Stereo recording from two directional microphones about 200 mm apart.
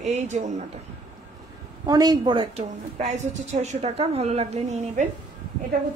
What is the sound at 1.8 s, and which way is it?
A woman's voice, 20° right (ahead or behind).